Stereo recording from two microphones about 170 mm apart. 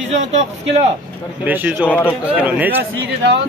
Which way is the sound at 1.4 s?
10° right (ahead or behind).